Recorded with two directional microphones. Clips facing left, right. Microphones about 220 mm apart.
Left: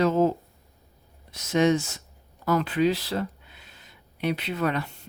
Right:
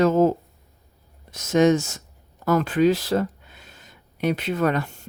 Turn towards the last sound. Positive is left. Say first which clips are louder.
# right 4 dB
turn(degrees=-45)  # may be behind; listen again after turning